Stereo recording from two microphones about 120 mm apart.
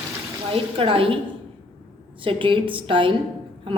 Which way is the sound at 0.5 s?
50° right (ahead or behind).